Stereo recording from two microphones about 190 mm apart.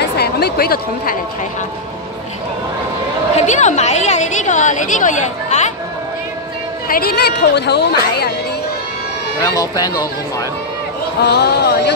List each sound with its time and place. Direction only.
0.2 s speech: 55° left (ahead or behind)
3.3 s a woman's voice: 40° left (ahead or behind)
6.9 s a woman's voice: 50° left (ahead or behind)
9.4 s speech: 20° left (ahead or behind)
11.2 s a woman's voice: 60° left (ahead or behind)